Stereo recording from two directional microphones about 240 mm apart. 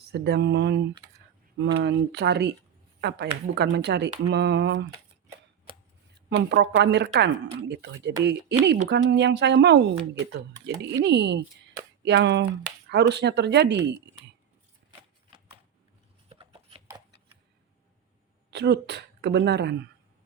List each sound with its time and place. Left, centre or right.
0.1 s a woman's voice: right
6.5 s a woman's voice: right
10.8 s a woman's voice: right
16.3 s shuffling cards: right
18.5 s speech: right